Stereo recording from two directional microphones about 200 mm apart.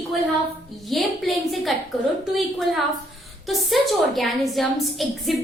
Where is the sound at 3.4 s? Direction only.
Centre (ahead or behind).